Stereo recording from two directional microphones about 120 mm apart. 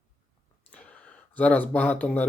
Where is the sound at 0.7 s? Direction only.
10° left (ahead or behind).